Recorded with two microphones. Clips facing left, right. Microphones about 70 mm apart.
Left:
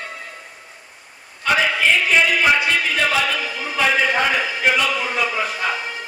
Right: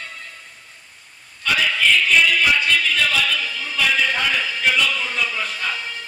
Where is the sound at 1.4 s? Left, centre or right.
Left.